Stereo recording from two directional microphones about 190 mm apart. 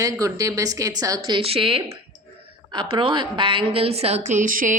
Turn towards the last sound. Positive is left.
turn(degrees=-45)  # may be behind; listen again after turning